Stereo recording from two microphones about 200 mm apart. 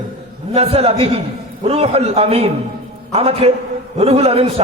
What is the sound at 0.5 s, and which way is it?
A man's voice, 30° right (ahead or behind).